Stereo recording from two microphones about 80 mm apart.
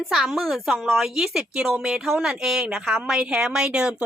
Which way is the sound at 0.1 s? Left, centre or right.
Centre.